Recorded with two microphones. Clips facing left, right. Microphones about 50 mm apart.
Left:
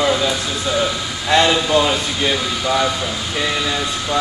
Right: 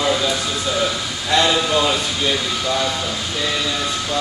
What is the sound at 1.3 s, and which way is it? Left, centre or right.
Speech, left.